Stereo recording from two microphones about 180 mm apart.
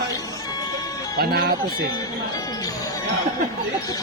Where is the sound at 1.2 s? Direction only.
60° right (ahead or behind).